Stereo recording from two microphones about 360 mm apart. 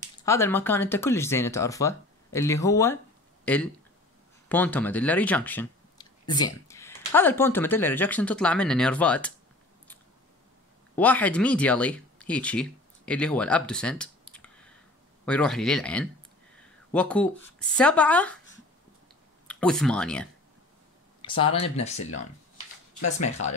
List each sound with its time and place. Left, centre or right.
0.2 s speech: centre
11.0 s speech: centre
19.4 s speech: centre
21.2 s a sound: centre
21.7 s speech: centre
23.1 s speech: centre